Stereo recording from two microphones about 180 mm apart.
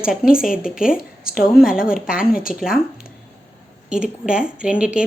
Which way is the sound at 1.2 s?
55° left (ahead or behind).